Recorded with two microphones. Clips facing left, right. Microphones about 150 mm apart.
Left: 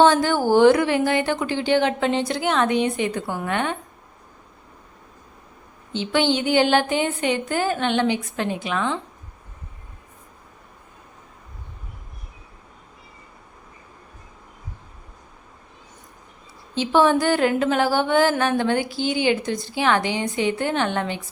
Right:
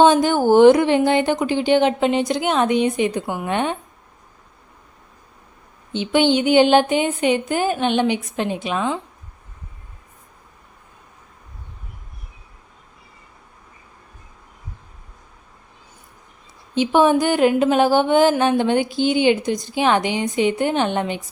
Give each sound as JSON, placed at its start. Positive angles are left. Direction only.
{"t": 0.0, "sound": "speech", "side_deg": -20}
{"t": 5.9, "sound": "speech", "side_deg": -15}
{"t": 16.7, "sound": "speech", "side_deg": -15}